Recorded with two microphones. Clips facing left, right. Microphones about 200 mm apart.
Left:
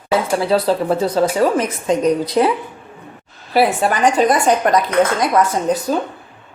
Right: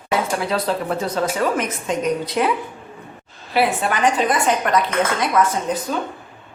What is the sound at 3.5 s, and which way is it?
Speech, 40° left (ahead or behind).